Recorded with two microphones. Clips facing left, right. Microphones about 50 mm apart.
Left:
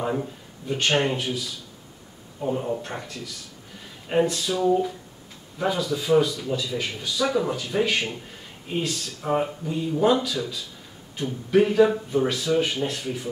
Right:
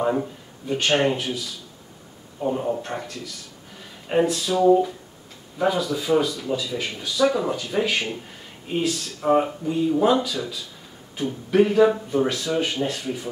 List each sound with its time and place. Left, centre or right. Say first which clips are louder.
0.0 s speech: right 4 dB; centre